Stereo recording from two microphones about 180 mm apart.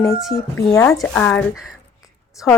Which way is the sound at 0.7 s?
15° left (ahead or behind).